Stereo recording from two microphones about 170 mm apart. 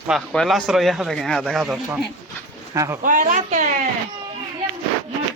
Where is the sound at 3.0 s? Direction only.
50° right (ahead or behind).